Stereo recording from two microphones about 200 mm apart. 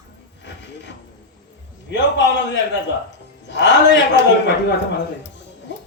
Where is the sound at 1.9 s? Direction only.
65° left (ahead or behind).